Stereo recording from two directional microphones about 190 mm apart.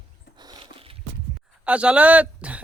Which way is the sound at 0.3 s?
20° right (ahead or behind).